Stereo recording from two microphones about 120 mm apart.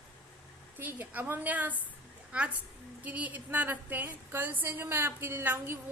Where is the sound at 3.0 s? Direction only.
10° right (ahead or behind).